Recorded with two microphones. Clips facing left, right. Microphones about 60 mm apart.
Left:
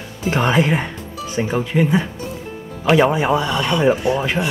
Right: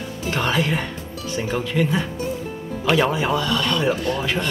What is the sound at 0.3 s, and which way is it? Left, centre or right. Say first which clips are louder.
Speech: left 5 dB; left.